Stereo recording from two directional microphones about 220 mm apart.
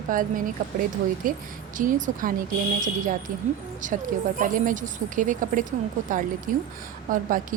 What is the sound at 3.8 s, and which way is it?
Speech, 35° right (ahead or behind).